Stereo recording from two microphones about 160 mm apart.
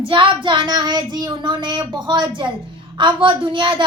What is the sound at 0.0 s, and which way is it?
Speech, 30° right (ahead or behind).